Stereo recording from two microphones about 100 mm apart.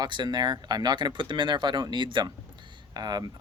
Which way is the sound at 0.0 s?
45° right (ahead or behind).